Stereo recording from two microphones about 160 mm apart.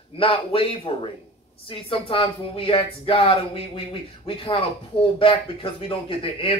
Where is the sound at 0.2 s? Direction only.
35° left (ahead or behind).